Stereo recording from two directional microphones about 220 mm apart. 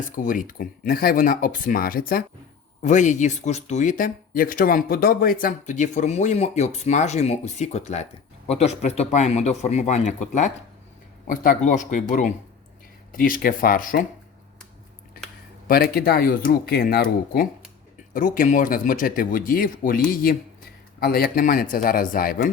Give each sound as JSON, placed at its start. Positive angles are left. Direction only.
{"t": 0.2, "sound": "speech", "side_deg": 35}
{"t": 15.6, "sound": "speech", "side_deg": 40}